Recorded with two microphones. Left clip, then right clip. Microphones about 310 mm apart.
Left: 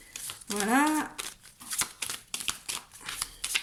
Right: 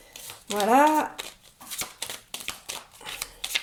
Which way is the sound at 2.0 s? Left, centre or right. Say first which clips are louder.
Right 1 dB; centre.